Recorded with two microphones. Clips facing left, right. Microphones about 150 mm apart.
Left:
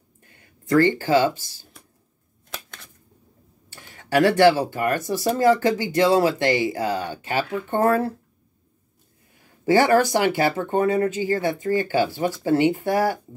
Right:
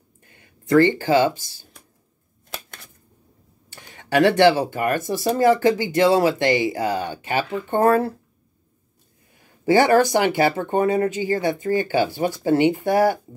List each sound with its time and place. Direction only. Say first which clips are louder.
0.9 s speech: right 1 dB; 15° right (ahead or behind)
2.5 s a sound: right 2 dB; 10° right (ahead or behind)
3.9 s speech: right 1 dB; 20° right (ahead or behind)
9.7 s speech: right 1 dB; 15° right (ahead or behind)